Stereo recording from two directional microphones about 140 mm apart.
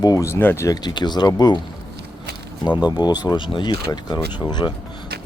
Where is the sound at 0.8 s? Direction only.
30° left (ahead or behind).